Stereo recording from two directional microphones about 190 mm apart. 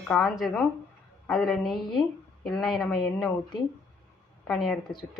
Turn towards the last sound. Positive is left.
turn(degrees=0)  # may be behind; listen again after turning